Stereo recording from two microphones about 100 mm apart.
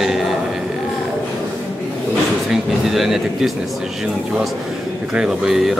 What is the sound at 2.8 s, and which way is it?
Speech, centre (ahead or behind).